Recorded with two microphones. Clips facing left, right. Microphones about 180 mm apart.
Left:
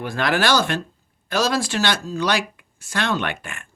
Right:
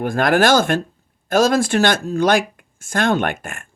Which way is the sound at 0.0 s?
50° right (ahead or behind).